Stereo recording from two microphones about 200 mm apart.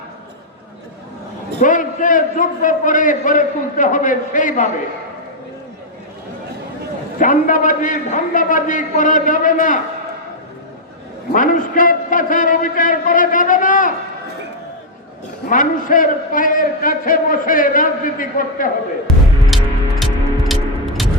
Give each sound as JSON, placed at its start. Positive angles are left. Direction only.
{"t": 1.5, "sound": "a man's voice", "side_deg": 40}
{"t": 7.2, "sound": "a man's voice", "side_deg": 40}
{"t": 11.3, "sound": "a man's voice", "side_deg": 40}
{"t": 15.4, "sound": "a man's voice", "side_deg": 40}
{"t": 19.5, "sound": "music", "side_deg": 0}